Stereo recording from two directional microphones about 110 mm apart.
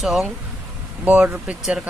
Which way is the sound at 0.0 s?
Centre (ahead or behind).